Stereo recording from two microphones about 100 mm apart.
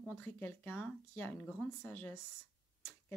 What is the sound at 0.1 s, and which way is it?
Speech, 15° left (ahead or behind).